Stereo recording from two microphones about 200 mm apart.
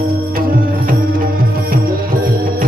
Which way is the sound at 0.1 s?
45° right (ahead or behind).